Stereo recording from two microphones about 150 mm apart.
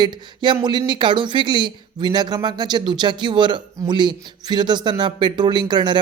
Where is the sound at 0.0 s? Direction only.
30° right (ahead or behind).